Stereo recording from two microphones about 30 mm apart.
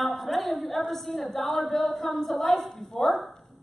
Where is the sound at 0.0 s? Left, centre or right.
Centre.